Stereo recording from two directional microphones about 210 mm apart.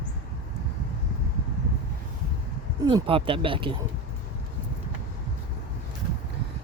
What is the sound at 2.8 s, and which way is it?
Speech, 25° right (ahead or behind).